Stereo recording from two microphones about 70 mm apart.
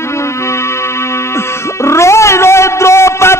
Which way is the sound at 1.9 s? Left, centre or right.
Left.